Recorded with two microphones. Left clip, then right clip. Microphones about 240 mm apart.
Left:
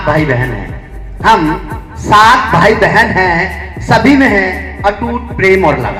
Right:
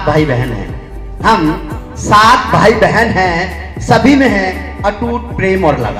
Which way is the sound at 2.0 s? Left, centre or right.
Right.